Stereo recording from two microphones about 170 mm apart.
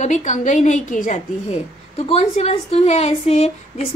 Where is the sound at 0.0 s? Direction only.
45° left (ahead or behind).